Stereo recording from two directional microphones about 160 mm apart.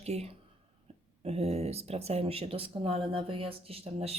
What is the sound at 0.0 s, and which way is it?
Speech, 40° right (ahead or behind).